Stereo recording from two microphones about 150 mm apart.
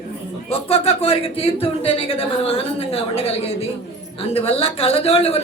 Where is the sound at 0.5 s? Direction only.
40° left (ahead or behind).